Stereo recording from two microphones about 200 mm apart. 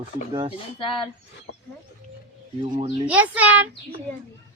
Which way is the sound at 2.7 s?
30° right (ahead or behind).